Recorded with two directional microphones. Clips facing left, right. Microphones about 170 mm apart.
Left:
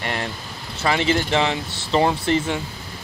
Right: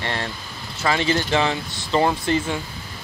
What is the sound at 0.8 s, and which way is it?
Speech, 20° left (ahead or behind).